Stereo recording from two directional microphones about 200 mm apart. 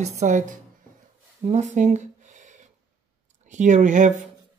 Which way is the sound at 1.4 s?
35° right (ahead or behind).